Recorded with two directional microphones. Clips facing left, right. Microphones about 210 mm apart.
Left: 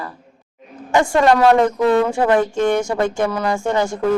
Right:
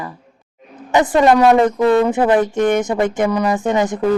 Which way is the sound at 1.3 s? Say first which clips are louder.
Right 1 dB; 5° right (ahead or behind).